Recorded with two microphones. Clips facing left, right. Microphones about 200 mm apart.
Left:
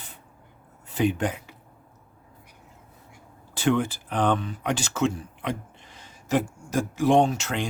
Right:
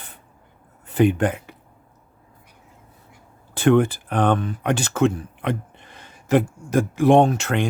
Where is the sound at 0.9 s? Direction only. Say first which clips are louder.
Right 6 dB; 55° right (ahead or behind).